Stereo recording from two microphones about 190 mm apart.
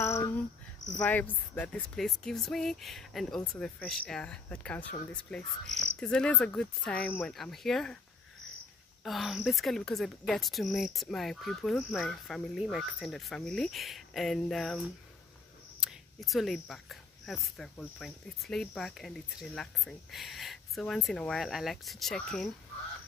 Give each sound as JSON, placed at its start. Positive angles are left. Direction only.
{"t": 0.0, "sound": "cricket", "side_deg": 15}
{"t": 0.9, "sound": "speech", "side_deg": 5}
{"t": 9.0, "sound": "speech", "side_deg": 0}